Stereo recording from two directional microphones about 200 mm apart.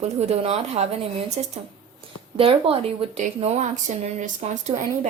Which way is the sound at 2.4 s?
30° right (ahead or behind).